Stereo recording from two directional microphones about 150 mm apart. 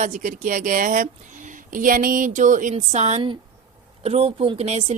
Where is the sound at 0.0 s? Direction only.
60° right (ahead or behind).